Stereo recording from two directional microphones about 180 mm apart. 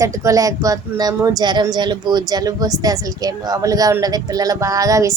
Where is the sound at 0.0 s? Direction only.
15° right (ahead or behind).